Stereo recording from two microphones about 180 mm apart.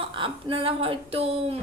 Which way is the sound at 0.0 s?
30° right (ahead or behind).